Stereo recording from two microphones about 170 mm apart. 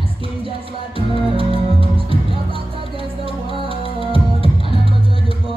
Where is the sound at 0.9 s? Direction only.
30° right (ahead or behind).